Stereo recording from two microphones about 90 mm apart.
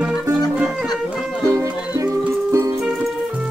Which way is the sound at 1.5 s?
30° right (ahead or behind).